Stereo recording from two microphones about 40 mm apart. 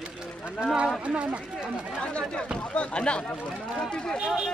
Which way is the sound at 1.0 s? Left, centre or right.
Right.